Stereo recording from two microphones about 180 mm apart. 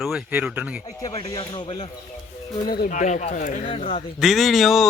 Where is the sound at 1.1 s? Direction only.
30° left (ahead or behind).